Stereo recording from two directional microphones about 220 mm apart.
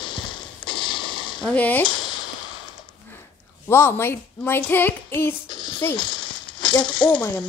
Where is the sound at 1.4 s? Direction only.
5° left (ahead or behind).